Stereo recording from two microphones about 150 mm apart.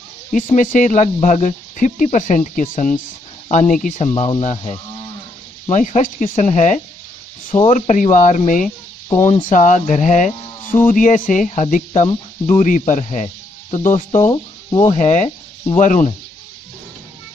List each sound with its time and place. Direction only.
0.3 s speech: 60° left (ahead or behind)
4.1 s speech: 35° left (ahead or behind)
4.4 s speech: 50° left (ahead or behind)
14.2 s speech: 25° left (ahead or behind)
14.9 s speech: 55° left (ahead or behind)